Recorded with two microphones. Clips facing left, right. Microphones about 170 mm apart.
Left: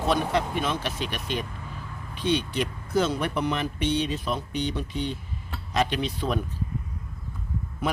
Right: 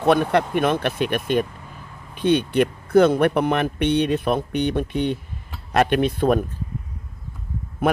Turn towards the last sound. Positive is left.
turn(degrees=-55)  # may be behind; listen again after turning